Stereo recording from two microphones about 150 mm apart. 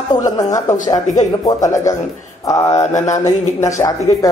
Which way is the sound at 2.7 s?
50° left (ahead or behind).